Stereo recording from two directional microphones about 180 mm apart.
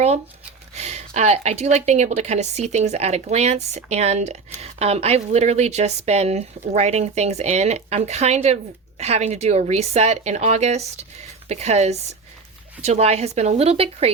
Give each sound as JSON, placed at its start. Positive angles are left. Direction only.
{"t": 0.7, "sound": "speech", "side_deg": -35}